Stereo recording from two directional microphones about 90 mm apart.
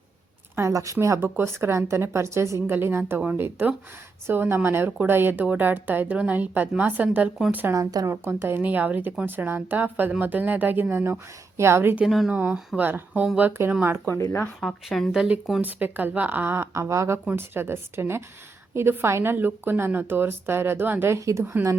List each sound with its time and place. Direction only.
0.7 s a woman's voice: 35° right (ahead or behind); by 7.3 s 20° right (ahead or behind)
7.7 s speech: 45° right (ahead or behind)
8.1 s a woman's voice: 30° right (ahead or behind)
11.9 s speech: 5° right (ahead or behind)
12.3 s speech: 15° right (ahead or behind)
13.8 s a woman's voice: 25° right (ahead or behind)
14.1 s speech: 25° left (ahead or behind)
14.6 s speech: centre (ahead or behind)
15.6 s a woman's voice: 20° right (ahead or behind)